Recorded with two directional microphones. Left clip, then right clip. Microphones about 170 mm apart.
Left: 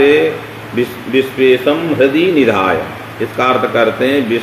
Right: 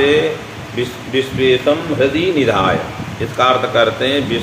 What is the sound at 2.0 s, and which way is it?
Speech, 45° left (ahead or behind).